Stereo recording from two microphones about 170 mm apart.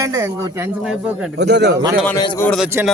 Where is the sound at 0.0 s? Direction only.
20° right (ahead or behind).